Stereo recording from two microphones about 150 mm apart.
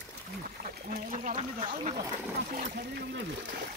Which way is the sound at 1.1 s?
45° right (ahead or behind).